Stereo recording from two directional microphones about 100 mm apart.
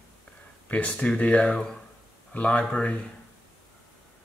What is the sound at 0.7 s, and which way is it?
Speech, 10° left (ahead or behind).